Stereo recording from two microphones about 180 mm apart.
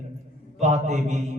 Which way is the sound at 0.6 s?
40° right (ahead or behind).